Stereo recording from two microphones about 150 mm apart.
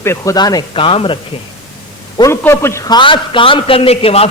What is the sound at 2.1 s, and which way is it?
A man's voice, 20° left (ahead or behind).